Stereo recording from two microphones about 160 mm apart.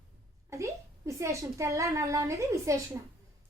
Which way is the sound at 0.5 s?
20° right (ahead or behind).